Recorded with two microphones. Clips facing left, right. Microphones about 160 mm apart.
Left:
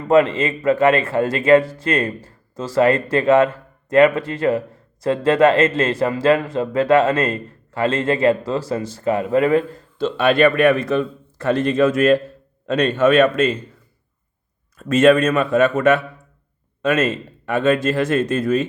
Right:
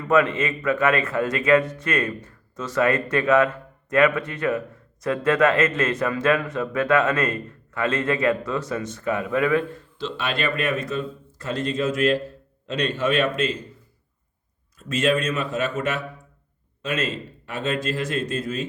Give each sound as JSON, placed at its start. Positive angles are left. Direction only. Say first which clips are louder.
{"t": 0.0, "sound": "a man's voice", "louder": "left 5 dB", "side_deg": 30}
{"t": 10.0, "sound": "a man's voice", "louder": "left 12 dB", "side_deg": 55}
{"t": 14.8, "sound": "a man's voice", "louder": "left 9 dB", "side_deg": 55}